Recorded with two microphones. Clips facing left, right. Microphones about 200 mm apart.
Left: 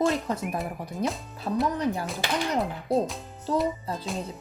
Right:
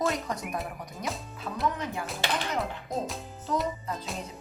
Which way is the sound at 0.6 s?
Centre (ahead or behind).